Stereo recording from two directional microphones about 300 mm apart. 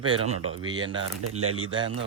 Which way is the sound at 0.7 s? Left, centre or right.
Centre.